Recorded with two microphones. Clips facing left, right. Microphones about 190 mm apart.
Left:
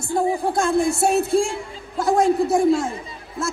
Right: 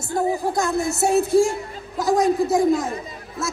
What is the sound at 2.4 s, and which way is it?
Speech, 30° left (ahead or behind).